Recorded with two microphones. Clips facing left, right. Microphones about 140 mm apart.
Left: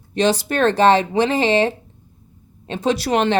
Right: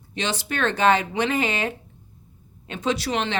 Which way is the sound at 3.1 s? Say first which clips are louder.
Left 8 dB; 50° left (ahead or behind).